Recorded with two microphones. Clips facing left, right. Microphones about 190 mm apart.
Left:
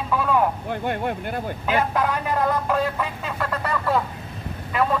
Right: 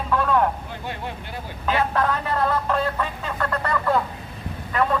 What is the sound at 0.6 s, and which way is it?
Speech, 55° left (ahead or behind).